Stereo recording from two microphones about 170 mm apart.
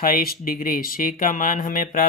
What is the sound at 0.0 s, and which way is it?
Speech, 60° left (ahead or behind).